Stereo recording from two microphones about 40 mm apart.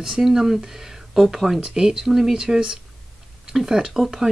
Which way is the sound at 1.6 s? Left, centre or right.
Centre.